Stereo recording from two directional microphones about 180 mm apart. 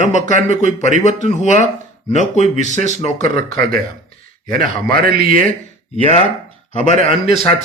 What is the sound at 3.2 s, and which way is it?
Speech, 55° right (ahead or behind).